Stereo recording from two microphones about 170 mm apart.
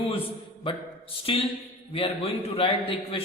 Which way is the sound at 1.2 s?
35° left (ahead or behind).